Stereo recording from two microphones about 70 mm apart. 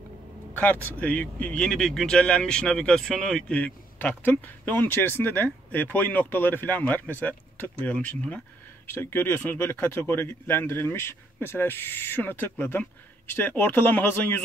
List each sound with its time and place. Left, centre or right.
0.6 s speech: left
1.6 s speech: centre
3.5 s speech: left
8.9 s speech: left